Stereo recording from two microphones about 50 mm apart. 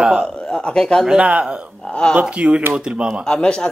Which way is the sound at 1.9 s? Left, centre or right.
Left.